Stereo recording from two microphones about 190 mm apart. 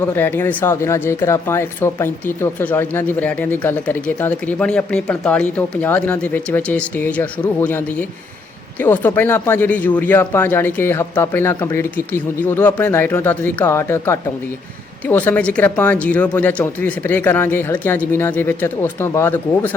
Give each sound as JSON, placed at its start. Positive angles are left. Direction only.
{"t": 0.0, "sound": "speech", "side_deg": 10}